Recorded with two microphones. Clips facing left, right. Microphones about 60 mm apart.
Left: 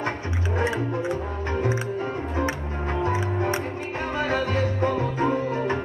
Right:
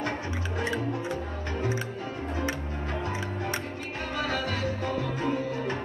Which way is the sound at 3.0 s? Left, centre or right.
Left.